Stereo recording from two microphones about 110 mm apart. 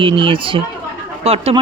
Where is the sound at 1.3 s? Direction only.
65° right (ahead or behind).